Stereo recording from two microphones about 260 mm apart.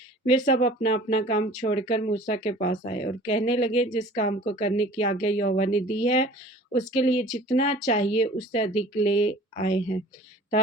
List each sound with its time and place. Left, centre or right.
0.3 s speech: left